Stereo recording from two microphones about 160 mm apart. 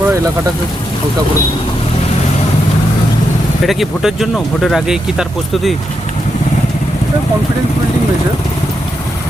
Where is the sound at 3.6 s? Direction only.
Centre (ahead or behind).